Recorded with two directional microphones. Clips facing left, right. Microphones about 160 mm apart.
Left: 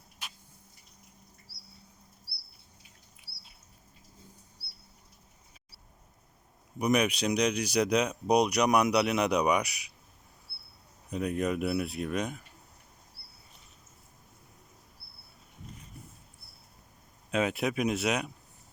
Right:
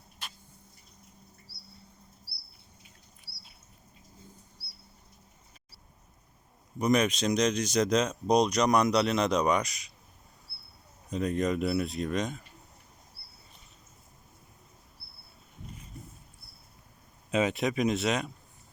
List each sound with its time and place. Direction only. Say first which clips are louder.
3.3 s a sound: right 2 dB; 35° right (ahead or behind)
6.7 s speech: right 1 dB; 10° left (ahead or behind)
11.1 s speech: right 1 dB; 10° left (ahead or behind)
17.3 s speech: right 1 dB; centre (ahead or behind)